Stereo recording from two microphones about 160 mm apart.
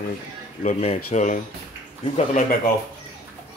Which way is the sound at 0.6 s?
45° left (ahead or behind).